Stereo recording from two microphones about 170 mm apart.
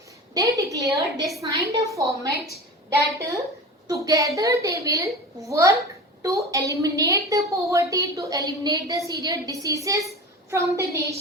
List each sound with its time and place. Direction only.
0.3 s a woman's voice: 20° right (ahead or behind)
3.2 s a woman's voice: 20° right (ahead or behind)